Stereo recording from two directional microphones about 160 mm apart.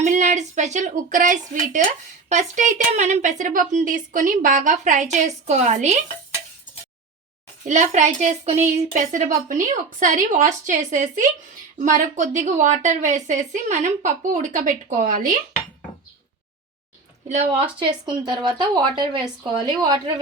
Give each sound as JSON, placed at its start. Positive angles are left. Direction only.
{"t": 0.0, "sound": "speech", "side_deg": -50}
{"t": 7.6, "sound": "speech", "side_deg": -50}
{"t": 17.2, "sound": "a woman's voice", "side_deg": -40}
{"t": 18.0, "sound": "speech", "side_deg": -25}